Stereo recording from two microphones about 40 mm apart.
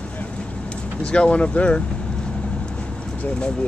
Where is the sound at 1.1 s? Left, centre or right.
Left.